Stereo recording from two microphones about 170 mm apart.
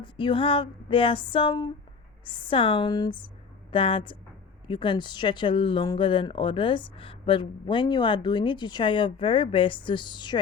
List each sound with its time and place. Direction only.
0.0 s a woman's voice: 30° left (ahead or behind)